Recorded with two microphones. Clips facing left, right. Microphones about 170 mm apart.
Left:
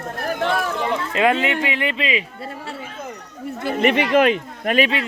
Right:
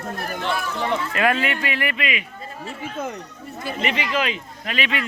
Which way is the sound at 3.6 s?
55° left (ahead or behind).